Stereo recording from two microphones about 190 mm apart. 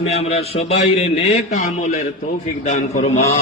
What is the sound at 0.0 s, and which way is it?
A man's voice, 35° left (ahead or behind).